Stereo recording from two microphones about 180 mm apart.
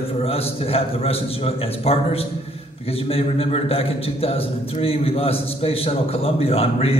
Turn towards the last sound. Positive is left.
turn(degrees=35)  # may be behind; listen again after turning